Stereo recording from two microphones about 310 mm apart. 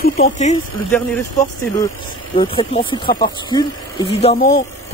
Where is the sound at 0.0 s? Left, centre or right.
Left.